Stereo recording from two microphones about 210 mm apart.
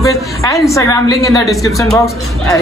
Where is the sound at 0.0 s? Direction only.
15° left (ahead or behind).